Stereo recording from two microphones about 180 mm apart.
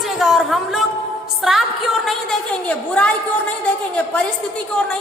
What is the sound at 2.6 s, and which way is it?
Speech, 5° left (ahead or behind).